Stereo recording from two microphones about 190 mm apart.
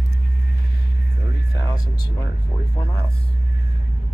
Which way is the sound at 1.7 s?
20° left (ahead or behind).